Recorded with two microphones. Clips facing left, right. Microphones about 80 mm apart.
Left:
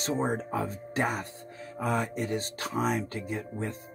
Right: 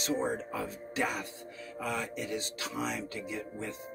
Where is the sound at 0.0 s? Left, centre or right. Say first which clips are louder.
Left 3 dB; left.